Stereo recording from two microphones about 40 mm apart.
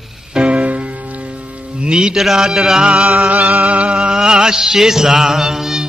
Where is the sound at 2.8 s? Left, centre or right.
Right.